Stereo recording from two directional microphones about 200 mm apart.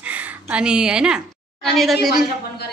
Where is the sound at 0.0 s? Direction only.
5° right (ahead or behind).